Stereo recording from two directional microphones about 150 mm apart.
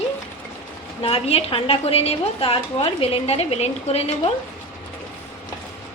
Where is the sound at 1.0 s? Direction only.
40° left (ahead or behind).